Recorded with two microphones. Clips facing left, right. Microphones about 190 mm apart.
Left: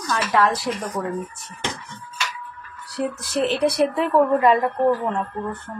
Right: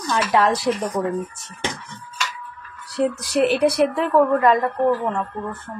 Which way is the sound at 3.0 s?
15° right (ahead or behind).